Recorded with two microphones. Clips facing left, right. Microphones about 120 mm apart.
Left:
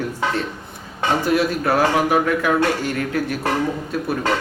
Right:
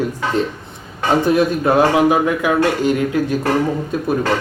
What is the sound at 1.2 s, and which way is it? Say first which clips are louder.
Speech: right 4 dB; 20° right (ahead or behind).